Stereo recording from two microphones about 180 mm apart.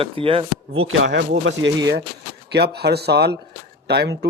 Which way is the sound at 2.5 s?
65° right (ahead or behind).